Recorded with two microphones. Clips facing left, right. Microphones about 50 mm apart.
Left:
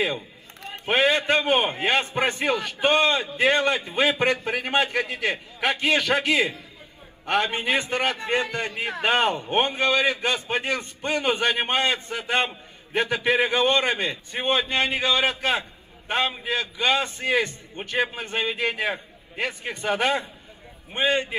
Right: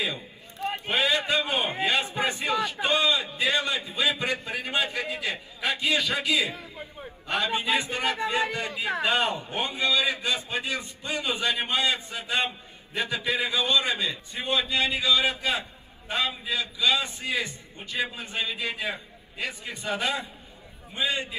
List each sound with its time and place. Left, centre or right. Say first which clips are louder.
0.7 s a man's voice: left 5 dB; left